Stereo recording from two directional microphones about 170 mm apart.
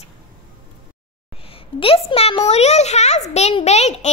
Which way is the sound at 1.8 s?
35° left (ahead or behind).